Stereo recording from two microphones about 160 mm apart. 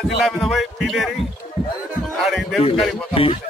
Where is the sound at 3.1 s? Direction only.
35° left (ahead or behind).